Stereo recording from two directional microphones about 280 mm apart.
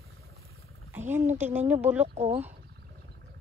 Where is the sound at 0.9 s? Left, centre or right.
Centre.